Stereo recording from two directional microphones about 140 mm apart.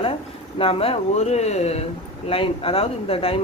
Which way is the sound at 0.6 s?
45° left (ahead or behind).